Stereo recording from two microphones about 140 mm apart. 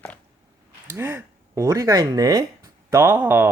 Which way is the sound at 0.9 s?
15° right (ahead or behind).